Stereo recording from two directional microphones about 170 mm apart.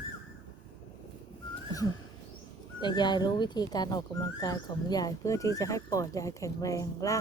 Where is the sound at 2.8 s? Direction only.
25° left (ahead or behind).